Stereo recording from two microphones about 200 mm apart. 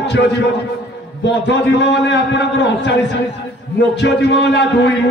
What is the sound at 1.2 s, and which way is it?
A man's voice, 60° left (ahead or behind).